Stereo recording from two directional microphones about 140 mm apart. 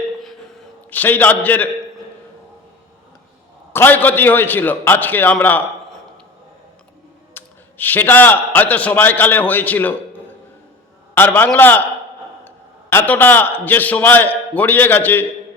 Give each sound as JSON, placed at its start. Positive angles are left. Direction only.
{"t": 0.9, "sound": "a man's voice", "side_deg": 10}
{"t": 3.7, "sound": "a man's voice", "side_deg": 15}
{"t": 7.3, "sound": "a man's voice", "side_deg": 15}